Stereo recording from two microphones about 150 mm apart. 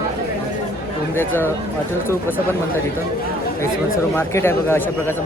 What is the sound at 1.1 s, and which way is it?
Speech, 15° left (ahead or behind).